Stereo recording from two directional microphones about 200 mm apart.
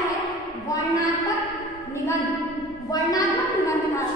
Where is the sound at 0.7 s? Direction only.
15° left (ahead or behind).